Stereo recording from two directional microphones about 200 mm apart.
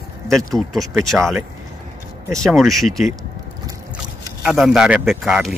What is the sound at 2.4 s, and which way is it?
Speech, centre (ahead or behind).